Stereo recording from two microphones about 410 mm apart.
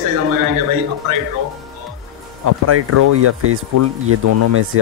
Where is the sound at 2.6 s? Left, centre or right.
Right.